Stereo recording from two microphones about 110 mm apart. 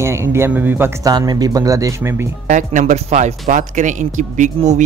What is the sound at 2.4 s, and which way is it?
Speech, 90° right.